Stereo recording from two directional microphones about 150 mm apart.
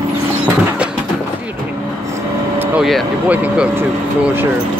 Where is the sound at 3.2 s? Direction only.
10° right (ahead or behind).